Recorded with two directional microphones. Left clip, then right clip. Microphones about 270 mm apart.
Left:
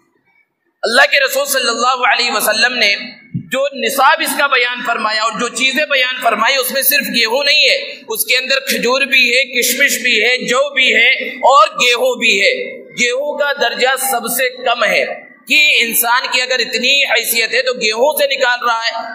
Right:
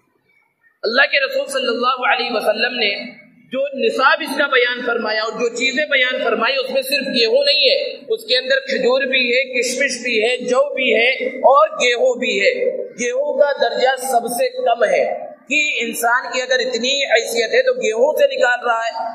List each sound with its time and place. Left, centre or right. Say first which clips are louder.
0.8 s a man's voice: left 5 dB; left